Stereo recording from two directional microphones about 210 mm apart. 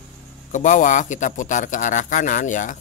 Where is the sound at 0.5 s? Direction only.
35° left (ahead or behind).